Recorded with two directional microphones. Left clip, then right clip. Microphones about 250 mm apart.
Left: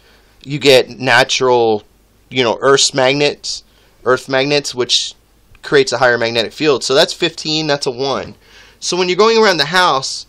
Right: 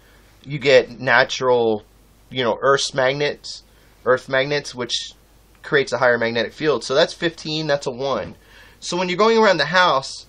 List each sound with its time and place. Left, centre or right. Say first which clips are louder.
0.4 s speech: left 5 dB; left